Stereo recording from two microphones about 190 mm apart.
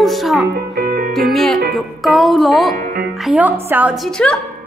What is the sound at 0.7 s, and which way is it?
Music, 55° right (ahead or behind).